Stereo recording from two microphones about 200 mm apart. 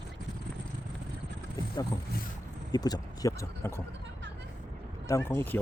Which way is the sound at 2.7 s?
20° left (ahead or behind).